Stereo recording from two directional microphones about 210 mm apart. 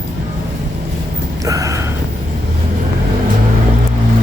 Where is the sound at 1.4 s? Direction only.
15° right (ahead or behind).